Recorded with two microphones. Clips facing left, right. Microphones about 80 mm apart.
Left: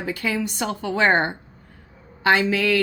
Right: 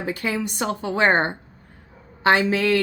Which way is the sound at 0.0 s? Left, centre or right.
Right.